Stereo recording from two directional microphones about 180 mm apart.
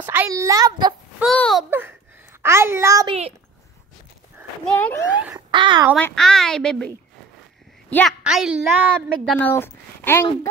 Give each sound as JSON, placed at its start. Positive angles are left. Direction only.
{"t": 0.0, "sound": "a child's voice", "side_deg": -10}
{"t": 1.2, "sound": "a woman's voice", "side_deg": 5}
{"t": 1.7, "sound": "a child's voice", "side_deg": -10}
{"t": 3.1, "sound": "a child's voice", "side_deg": -30}
{"t": 4.6, "sound": "speech", "side_deg": 10}
{"t": 5.5, "sound": "a child's voice", "side_deg": -25}
{"t": 5.9, "sound": "a woman's voice", "side_deg": 5}
{"t": 7.9, "sound": "a woman's voice", "side_deg": 0}
{"t": 9.4, "sound": "speech", "side_deg": 10}